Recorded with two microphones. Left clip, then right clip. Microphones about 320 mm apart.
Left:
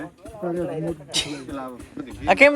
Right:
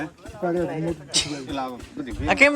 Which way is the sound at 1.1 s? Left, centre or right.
Centre.